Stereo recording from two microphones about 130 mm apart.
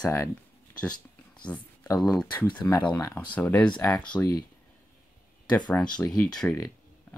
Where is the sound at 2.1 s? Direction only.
10° left (ahead or behind).